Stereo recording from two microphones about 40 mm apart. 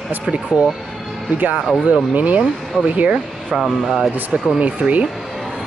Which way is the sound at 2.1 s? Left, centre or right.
Right.